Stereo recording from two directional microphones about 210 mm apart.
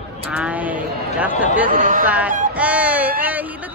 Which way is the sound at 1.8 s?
40° right (ahead or behind).